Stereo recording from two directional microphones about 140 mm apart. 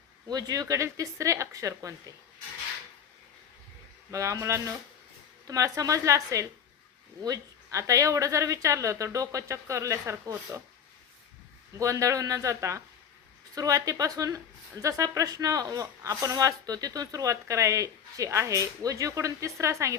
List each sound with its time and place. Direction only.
0.3 s speech: 25° right (ahead or behind)
4.1 s speech: 20° right (ahead or behind)
11.8 s speech: 20° right (ahead or behind)